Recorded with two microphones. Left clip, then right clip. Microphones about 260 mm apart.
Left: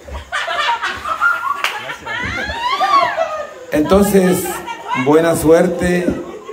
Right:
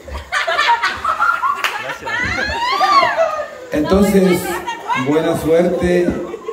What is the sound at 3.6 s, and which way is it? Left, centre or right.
A man's voice, centre.